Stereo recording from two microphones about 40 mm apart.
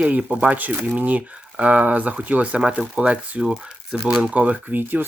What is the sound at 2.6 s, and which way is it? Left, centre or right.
Speech, centre.